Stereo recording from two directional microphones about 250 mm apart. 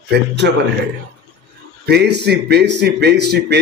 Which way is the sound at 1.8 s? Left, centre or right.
Right.